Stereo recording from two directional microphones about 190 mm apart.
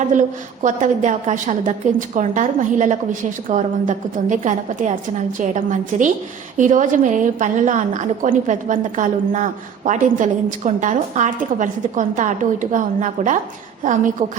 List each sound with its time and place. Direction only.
0.1 s a woman's voice: 40° right (ahead or behind)